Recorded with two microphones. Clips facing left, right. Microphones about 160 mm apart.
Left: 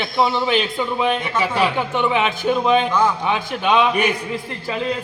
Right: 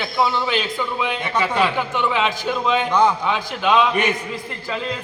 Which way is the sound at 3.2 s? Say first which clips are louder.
Left 1 dB; 15° left (ahead or behind).